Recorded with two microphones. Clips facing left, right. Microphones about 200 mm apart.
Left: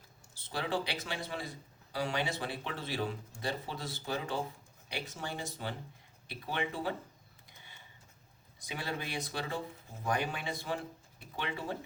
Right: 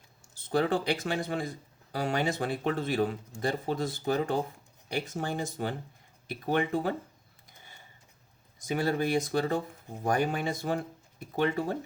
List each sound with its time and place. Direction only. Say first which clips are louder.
0.3 s speech: right 8 dB; 50° right (ahead or behind)
8.5 s speech: right 11 dB; 45° right (ahead or behind)